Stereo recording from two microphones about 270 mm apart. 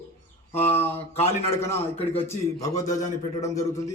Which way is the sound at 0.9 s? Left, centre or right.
Left.